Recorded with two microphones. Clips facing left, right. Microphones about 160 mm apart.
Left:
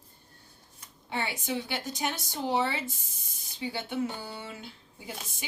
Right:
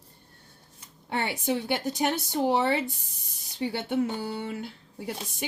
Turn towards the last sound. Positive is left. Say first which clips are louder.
# right 7 dB
turn(degrees=-70)  # may be behind; listen again after turning